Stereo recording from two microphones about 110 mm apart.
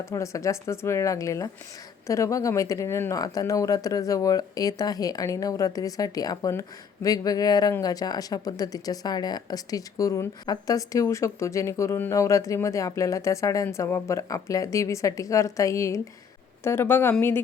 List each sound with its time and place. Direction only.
0.0 s speech: 30° left (ahead or behind)